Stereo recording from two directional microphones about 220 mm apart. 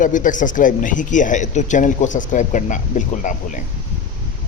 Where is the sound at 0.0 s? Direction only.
35° left (ahead or behind).